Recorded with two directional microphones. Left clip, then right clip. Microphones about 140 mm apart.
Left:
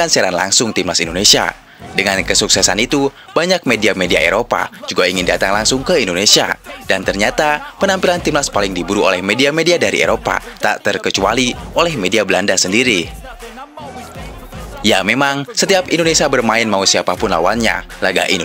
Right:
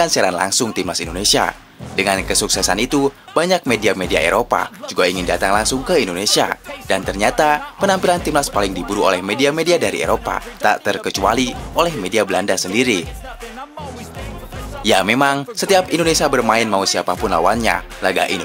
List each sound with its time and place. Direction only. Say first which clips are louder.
0.0 s speech: left 2 dB; 30° left (ahead or behind)
14.8 s speech: left 1 dB; 30° left (ahead or behind)